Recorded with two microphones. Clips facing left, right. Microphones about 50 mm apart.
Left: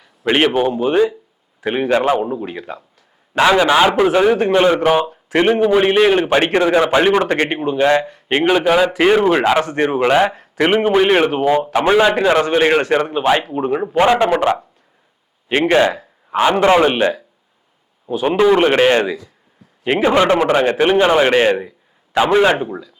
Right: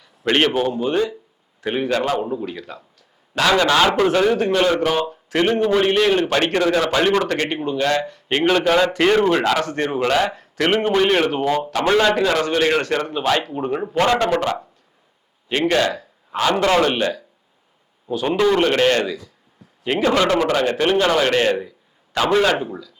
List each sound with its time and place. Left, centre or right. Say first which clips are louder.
0.0 s a man's voice: left 3 dB; centre
13.5 s speech: left 4 dB; centre
13.9 s a man's voice: left 4 dB; centre
15.4 s a man's voice: left 5 dB; left